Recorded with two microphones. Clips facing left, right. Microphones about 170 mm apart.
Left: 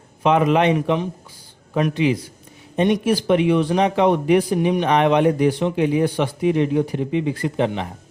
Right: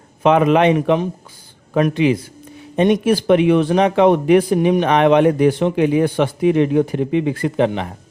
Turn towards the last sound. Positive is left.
turn(degrees=-75)  # may be behind; listen again after turning